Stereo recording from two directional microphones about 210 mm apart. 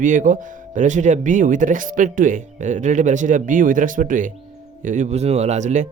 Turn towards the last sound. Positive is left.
turn(degrees=-35)  # may be behind; listen again after turning